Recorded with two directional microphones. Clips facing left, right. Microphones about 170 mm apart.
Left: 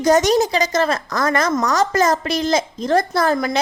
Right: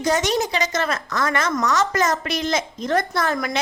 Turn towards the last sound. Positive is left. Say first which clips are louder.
# left 5 dB
turn(degrees=30)  # may be behind; listen again after turning